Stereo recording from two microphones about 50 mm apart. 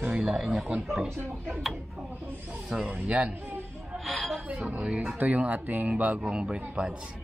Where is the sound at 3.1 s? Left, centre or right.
Right.